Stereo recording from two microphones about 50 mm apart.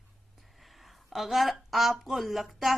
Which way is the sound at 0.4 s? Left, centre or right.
Centre.